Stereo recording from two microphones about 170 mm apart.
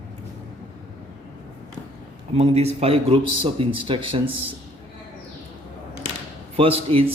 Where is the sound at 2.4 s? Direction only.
40° right (ahead or behind).